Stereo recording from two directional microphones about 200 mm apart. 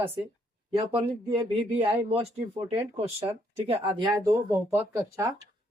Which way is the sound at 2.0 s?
30° right (ahead or behind).